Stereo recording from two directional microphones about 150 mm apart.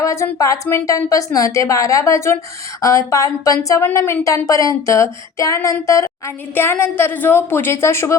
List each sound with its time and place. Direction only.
0.0 s speech: 20° left (ahead or behind)